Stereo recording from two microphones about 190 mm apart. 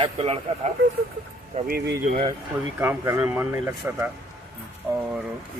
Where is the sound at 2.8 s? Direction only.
10° right (ahead or behind).